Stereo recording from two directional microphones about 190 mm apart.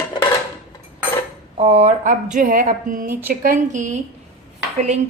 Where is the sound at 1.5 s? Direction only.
35° right (ahead or behind).